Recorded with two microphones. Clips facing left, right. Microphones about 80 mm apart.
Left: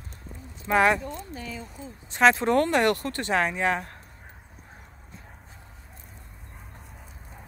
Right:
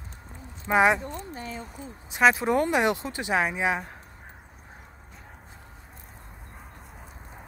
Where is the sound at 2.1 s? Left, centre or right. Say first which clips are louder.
Left 1 dB; centre.